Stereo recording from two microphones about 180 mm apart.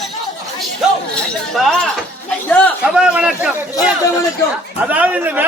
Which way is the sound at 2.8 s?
5° right (ahead or behind).